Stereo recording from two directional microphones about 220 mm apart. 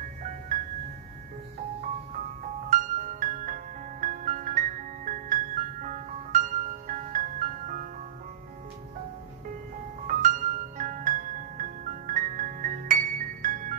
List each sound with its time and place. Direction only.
2.7 s music: 35° right (ahead or behind)
10.0 s music: 35° right (ahead or behind)